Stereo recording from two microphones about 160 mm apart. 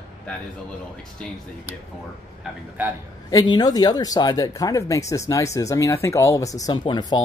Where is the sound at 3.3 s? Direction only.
25° left (ahead or behind).